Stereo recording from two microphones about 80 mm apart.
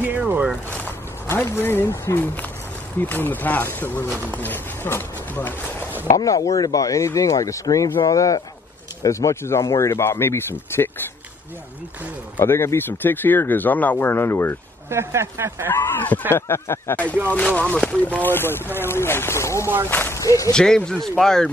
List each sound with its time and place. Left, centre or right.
0.7 s speech: left
6.1 s speech: left
12.4 s speech: left
14.9 s speech: right
15.7 s speech: left
16.9 s speech: centre
20.2 s speech: left
20.5 s speech: centre